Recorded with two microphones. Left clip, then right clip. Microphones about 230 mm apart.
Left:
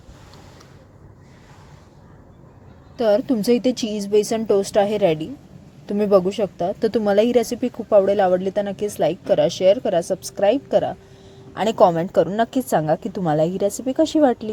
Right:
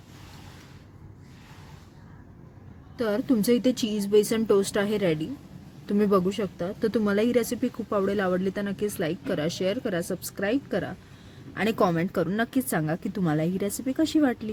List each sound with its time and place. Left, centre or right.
3.0 s speech: centre